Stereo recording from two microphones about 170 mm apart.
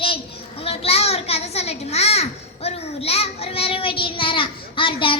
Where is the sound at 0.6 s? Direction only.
35° left (ahead or behind).